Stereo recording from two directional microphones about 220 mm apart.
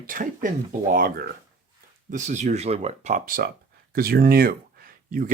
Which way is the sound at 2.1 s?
35° right (ahead or behind).